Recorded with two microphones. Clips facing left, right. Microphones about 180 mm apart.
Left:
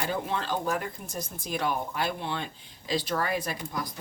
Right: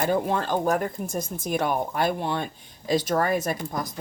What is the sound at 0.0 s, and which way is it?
Speech, 50° right (ahead or behind).